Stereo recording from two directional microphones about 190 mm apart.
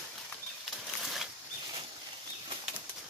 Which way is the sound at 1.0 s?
Centre (ahead or behind).